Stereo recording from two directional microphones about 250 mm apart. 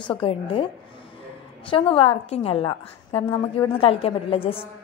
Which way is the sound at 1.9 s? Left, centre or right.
Left.